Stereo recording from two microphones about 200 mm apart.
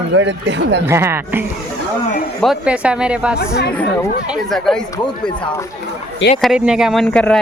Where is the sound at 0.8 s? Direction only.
10° right (ahead or behind).